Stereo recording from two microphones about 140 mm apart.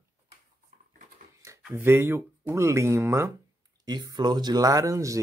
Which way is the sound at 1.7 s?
15° right (ahead or behind).